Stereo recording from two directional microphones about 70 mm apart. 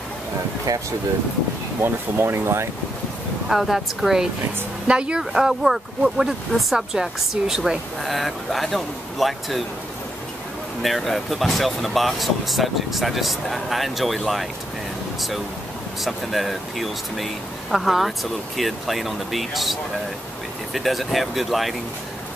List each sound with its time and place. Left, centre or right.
0.7 s speech: right
1.8 s speech: right
3.4 s speech: centre
10.8 s speech: centre
16.0 s speech: centre